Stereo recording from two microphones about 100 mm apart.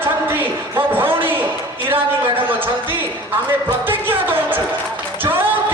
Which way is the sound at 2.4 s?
20° right (ahead or behind).